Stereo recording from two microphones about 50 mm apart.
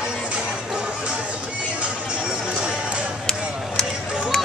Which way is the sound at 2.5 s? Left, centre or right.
Right.